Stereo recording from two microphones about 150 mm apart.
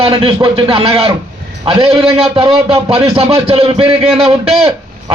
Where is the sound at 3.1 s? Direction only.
40° right (ahead or behind).